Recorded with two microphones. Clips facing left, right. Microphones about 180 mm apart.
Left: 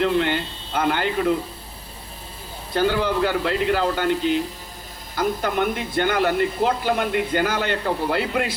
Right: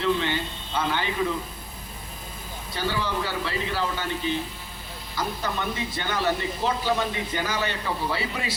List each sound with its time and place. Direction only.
0.0 s speech: 60° left (ahead or behind)
2.7 s speech: 55° left (ahead or behind); by 4.4 s 75° left (ahead or behind)
5.1 s speech: 60° left (ahead or behind)